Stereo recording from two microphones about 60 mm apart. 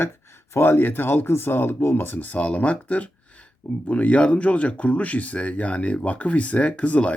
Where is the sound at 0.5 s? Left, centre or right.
Left.